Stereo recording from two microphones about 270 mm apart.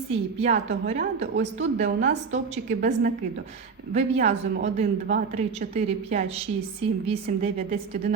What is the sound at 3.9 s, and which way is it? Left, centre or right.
A woman's voice, right.